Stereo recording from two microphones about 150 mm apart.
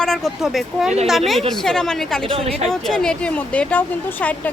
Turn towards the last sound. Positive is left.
turn(degrees=10)  # may be behind; listen again after turning